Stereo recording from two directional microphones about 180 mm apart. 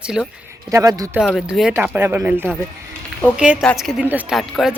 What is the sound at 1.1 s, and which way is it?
A man's voice, 5° right (ahead or behind).